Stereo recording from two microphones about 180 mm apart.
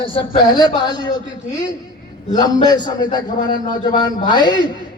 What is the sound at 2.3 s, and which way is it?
A man's voice, 25° left (ahead or behind).